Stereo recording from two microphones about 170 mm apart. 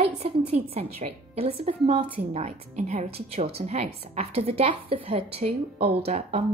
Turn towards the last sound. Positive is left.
turn(degrees=-35)  # may be behind; listen again after turning